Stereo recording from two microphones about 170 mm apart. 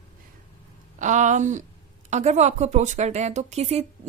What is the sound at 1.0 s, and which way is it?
A woman's voice, 45° right (ahead or behind).